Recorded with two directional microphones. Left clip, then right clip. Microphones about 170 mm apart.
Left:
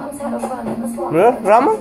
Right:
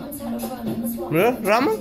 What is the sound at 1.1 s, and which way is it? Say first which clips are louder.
Speech: left 7 dB; 25° right (ahead or behind).